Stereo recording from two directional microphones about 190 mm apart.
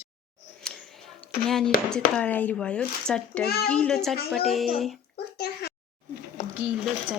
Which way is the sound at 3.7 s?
5° left (ahead or behind).